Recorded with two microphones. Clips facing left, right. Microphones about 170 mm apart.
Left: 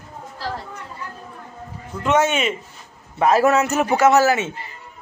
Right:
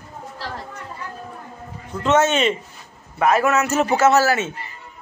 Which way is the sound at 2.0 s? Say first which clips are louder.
Right 1 dB; 10° left (ahead or behind).